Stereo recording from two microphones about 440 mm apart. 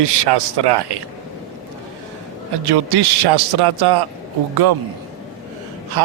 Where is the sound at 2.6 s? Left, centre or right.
Right.